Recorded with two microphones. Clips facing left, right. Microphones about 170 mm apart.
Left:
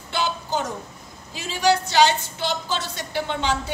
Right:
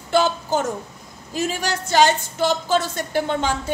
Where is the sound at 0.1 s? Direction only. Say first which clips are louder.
Right 6 dB; 45° right (ahead or behind).